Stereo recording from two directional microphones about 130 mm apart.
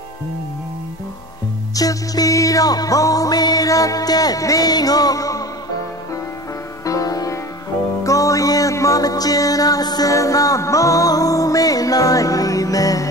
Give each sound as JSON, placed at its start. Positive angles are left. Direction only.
{"t": 1.8, "sound": "music", "side_deg": 25}
{"t": 6.9, "sound": "music", "side_deg": 25}